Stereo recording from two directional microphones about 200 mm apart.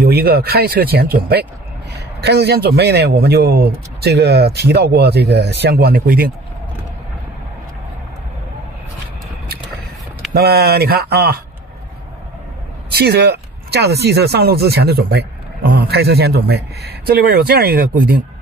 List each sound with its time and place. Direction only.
0.0 s speech: 50° right (ahead or behind)
10.3 s speech: 50° right (ahead or behind)
12.9 s speech: 55° right (ahead or behind)